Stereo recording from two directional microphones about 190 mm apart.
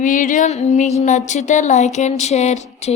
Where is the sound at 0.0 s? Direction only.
45° left (ahead or behind).